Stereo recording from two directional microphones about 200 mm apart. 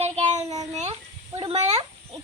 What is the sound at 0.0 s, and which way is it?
Child singing, 35° right (ahead or behind).